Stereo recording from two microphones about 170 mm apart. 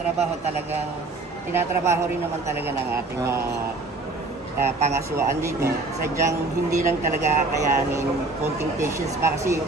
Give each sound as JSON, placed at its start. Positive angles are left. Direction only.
{"t": 1.5, "sound": "speech", "side_deg": -15}
{"t": 4.6, "sound": "speech", "side_deg": -15}